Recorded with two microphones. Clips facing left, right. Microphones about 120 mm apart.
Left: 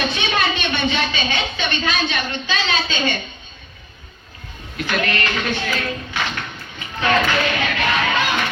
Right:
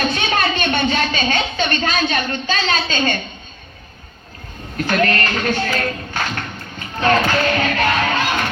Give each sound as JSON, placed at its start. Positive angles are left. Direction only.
{"t": 0.1, "sound": "a woman's voice", "side_deg": -45}
{"t": 4.8, "sound": "speech", "side_deg": -45}